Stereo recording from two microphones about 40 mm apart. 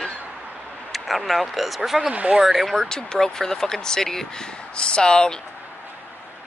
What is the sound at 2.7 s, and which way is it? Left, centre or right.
Speech, centre.